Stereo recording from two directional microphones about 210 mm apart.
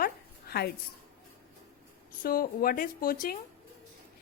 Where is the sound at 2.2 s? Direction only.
45° left (ahead or behind).